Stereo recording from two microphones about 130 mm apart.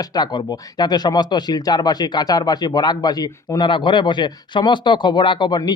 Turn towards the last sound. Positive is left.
turn(degrees=35)  # may be behind; listen again after turning